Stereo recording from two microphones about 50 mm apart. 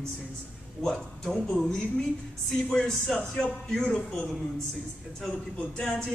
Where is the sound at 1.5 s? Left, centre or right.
Centre.